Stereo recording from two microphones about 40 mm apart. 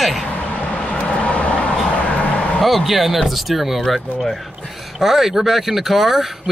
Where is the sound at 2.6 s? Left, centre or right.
Centre.